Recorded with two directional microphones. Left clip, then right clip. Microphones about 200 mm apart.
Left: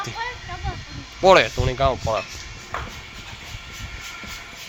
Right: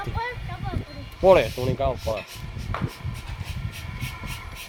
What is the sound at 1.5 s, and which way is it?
Speech, 5° right (ahead or behind).